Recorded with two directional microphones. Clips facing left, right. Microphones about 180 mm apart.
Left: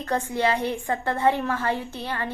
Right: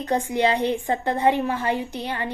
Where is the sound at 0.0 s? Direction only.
15° right (ahead or behind).